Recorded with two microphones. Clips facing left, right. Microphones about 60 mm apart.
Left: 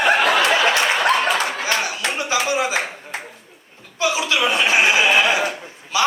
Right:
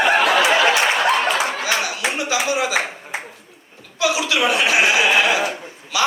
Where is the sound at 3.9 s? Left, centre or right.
Left.